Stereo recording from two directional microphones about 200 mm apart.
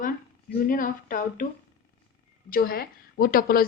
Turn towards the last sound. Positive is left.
turn(degrees=45)  # may be behind; listen again after turning